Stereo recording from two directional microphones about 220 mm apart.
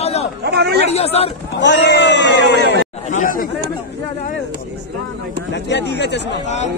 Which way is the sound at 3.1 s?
35° left (ahead or behind).